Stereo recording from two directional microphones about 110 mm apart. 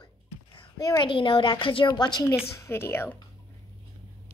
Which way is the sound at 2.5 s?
20° left (ahead or behind).